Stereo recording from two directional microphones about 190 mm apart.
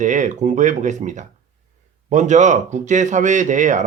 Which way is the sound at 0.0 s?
40° right (ahead or behind).